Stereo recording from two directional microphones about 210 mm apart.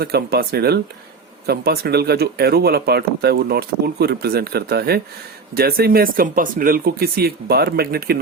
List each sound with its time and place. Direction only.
0.0 s speech: 50° right (ahead or behind)